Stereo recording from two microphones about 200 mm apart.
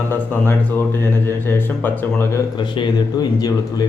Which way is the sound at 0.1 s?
10° left (ahead or behind).